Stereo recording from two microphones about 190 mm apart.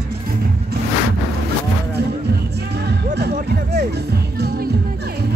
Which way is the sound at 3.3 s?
60° right (ahead or behind).